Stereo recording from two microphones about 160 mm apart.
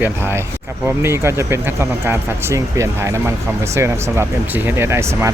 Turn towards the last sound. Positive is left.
turn(degrees=-15)  # may be behind; listen again after turning